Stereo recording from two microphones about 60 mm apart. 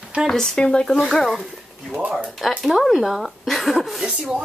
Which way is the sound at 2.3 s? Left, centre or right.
Centre.